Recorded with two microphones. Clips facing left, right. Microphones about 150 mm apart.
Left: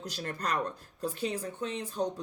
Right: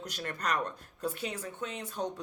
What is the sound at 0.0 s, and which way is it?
Speech, 30° left (ahead or behind).